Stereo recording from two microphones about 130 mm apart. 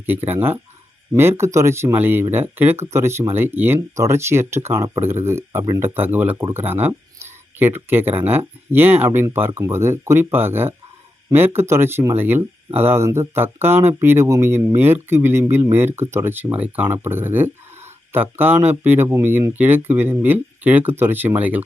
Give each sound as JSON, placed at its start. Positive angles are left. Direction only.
{"t": 0.0, "sound": "speech", "side_deg": -15}